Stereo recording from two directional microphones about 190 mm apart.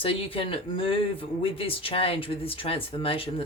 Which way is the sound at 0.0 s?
30° left (ahead or behind).